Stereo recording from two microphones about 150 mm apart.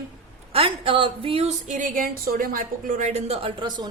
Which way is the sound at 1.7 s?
60° right (ahead or behind).